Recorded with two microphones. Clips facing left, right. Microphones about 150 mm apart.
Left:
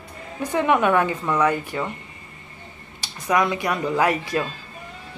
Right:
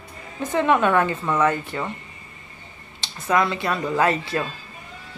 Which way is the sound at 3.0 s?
15° left (ahead or behind).